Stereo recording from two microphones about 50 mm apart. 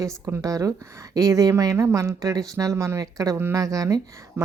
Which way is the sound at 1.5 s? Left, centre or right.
Right.